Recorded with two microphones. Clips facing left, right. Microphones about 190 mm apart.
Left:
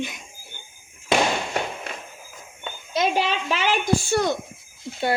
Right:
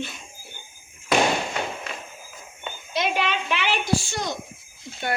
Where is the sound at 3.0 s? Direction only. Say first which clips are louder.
Left 3 dB; 40° left (ahead or behind); by 4.3 s 55° left (ahead or behind).